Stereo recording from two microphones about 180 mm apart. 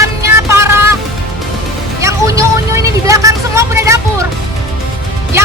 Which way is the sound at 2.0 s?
15° right (ahead or behind).